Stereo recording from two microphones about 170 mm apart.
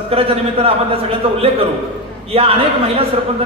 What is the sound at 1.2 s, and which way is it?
A man's voice, 35° right (ahead or behind).